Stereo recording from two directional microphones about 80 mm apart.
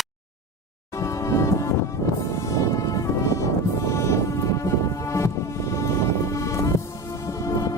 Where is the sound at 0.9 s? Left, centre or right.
Left.